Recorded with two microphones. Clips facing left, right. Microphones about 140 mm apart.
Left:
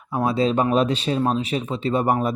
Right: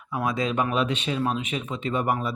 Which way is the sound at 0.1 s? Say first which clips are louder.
Left 6 dB; 30° left (ahead or behind).